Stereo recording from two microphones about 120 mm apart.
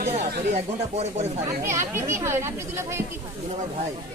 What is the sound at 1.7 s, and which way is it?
Speech, 20° right (ahead or behind).